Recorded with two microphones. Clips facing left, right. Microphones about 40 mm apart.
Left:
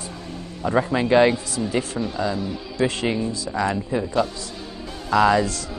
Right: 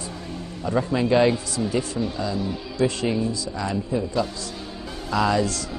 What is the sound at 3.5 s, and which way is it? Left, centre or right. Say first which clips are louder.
Speech: left 5 dB; left.